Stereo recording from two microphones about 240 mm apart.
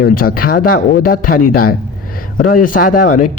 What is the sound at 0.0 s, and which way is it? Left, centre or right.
A man's voice, left.